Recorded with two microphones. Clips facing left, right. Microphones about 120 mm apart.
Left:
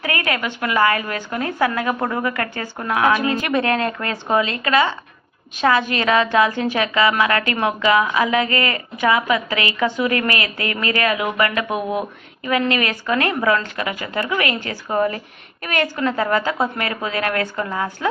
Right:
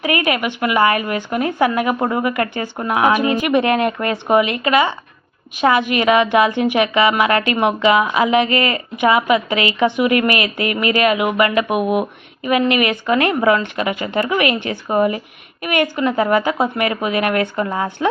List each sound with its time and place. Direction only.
0.0 s a woman's voice: 20° right (ahead or behind)